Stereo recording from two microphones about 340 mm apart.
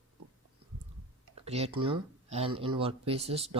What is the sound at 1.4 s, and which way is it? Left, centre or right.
Speech, centre.